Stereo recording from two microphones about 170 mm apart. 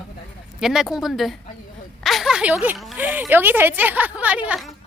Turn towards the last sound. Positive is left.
turn(degrees=-5)  # may be behind; listen again after turning